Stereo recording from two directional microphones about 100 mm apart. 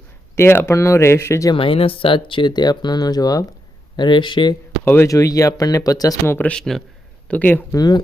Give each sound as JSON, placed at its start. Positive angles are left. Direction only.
{"t": 0.3, "sound": "speech", "side_deg": 25}
{"t": 1.5, "sound": "speech", "side_deg": 65}
{"t": 3.9, "sound": "speech", "side_deg": 50}
{"t": 5.0, "sound": "speech", "side_deg": 35}
{"t": 6.2, "sound": "speech", "side_deg": 20}
{"t": 6.5, "sound": "a man's voice", "side_deg": 5}
{"t": 7.3, "sound": "speech", "side_deg": 15}
{"t": 7.7, "sound": "speech", "side_deg": 40}